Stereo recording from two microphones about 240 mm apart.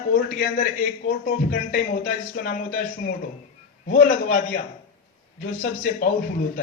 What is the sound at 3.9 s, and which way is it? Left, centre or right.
Speech, left.